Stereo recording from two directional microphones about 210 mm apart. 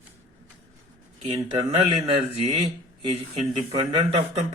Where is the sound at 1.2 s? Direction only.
25° right (ahead or behind).